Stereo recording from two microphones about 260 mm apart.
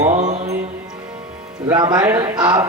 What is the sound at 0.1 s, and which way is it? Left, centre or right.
Mantra, right.